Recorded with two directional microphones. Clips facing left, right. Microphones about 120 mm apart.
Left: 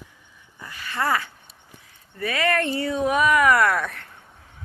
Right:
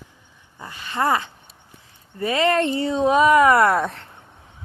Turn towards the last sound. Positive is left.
turn(degrees=-25)  # may be behind; listen again after turning